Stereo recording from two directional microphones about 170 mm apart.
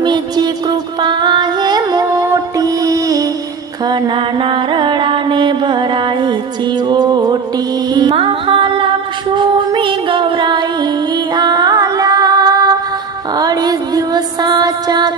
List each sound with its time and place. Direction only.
0.0 s music: 25° right (ahead or behind)
3.8 s mantra: 25° right (ahead or behind)
6.9 s music: 25° right (ahead or behind)